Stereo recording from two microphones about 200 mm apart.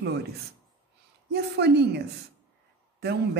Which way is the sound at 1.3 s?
55° right (ahead or behind).